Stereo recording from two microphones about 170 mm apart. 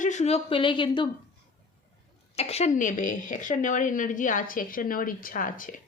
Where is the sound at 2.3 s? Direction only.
40° left (ahead or behind).